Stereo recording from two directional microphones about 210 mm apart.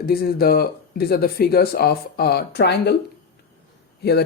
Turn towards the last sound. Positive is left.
turn(degrees=50)  # may be behind; listen again after turning